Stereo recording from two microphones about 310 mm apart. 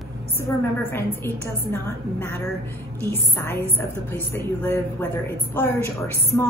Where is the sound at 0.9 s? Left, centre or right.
Centre.